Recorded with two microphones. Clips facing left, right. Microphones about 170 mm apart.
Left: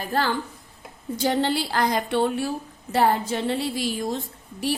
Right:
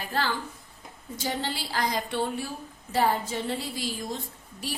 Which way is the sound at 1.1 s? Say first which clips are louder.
Left 9 dB; 65° left (ahead or behind).